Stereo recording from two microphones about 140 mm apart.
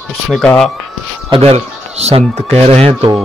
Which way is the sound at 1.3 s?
45° right (ahead or behind).